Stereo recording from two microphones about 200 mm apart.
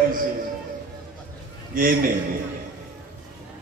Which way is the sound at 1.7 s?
45° right (ahead or behind).